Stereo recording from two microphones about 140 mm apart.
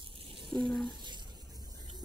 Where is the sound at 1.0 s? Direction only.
30° right (ahead or behind).